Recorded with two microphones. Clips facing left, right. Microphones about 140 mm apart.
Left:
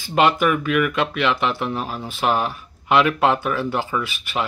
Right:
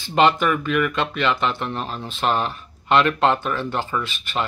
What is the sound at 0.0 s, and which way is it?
Speech, 5° left (ahead or behind).